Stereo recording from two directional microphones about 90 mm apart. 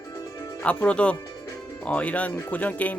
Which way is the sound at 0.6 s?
15° left (ahead or behind).